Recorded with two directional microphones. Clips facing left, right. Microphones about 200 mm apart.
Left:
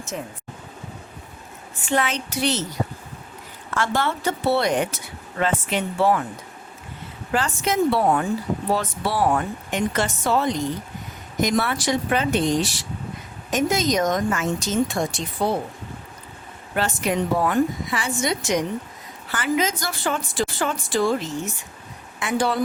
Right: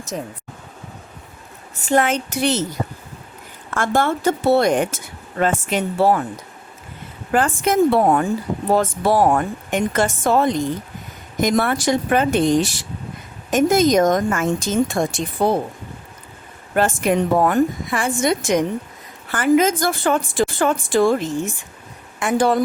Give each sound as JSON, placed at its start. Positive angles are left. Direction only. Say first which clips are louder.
{"t": 0.1, "sound": "speech", "louder": "right 4 dB", "side_deg": -40}
{"t": 1.8, "sound": "speech", "louder": "right 6 dB", "side_deg": -45}
{"t": 3.8, "sound": "speech", "louder": "right 4 dB", "side_deg": -50}
{"t": 7.3, "sound": "speech", "louder": "right 5 dB", "side_deg": -50}
{"t": 16.7, "sound": "speech", "louder": "right 5 dB", "side_deg": -50}